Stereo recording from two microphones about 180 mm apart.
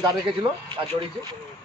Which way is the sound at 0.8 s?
30° right (ahead or behind).